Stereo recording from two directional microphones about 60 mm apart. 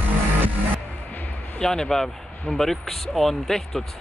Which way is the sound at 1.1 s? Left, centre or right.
Left.